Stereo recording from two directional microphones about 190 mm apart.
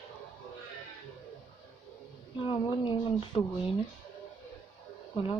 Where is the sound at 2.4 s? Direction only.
25° left (ahead or behind).